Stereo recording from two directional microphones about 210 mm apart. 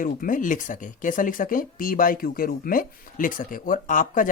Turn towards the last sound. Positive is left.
turn(degrees=40)  # may be behind; listen again after turning